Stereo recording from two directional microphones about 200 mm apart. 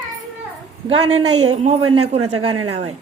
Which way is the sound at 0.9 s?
30° right (ahead or behind).